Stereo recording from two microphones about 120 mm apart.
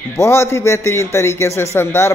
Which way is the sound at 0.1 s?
20° left (ahead or behind).